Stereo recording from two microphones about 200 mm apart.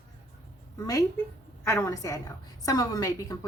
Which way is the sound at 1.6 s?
15° left (ahead or behind).